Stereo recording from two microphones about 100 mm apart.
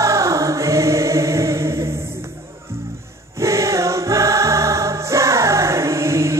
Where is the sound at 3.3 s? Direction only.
30° right (ahead or behind).